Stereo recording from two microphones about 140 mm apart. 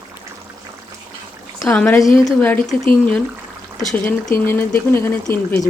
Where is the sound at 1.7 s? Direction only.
5° left (ahead or behind).